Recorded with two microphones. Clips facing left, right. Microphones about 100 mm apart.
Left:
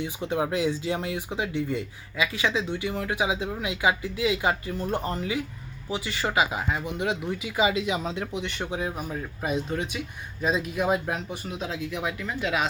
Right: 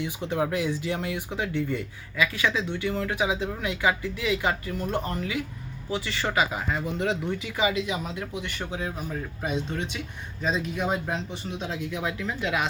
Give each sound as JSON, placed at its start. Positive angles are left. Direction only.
{"t": 0.0, "sound": "speech", "side_deg": 20}
{"t": 6.2, "sound": "speech", "side_deg": 15}
{"t": 9.4, "sound": "speech", "side_deg": 5}